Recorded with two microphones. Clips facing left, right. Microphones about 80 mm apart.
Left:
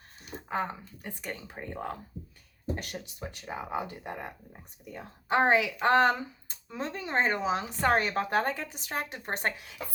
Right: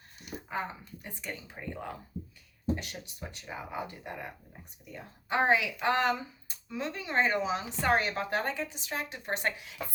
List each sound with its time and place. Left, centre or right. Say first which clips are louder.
0.6 s speech: left 4 dB; left
3.2 s speech: left 3 dB; left